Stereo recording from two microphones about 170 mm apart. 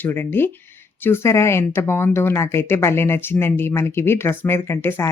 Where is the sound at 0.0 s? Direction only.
10° left (ahead or behind).